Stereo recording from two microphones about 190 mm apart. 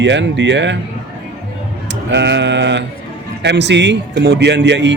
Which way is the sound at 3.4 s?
65° right (ahead or behind).